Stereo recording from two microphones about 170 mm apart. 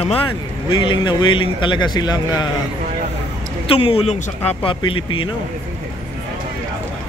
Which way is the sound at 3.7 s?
30° left (ahead or behind).